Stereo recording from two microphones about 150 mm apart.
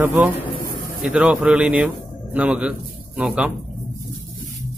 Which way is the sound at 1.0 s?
5° right (ahead or behind).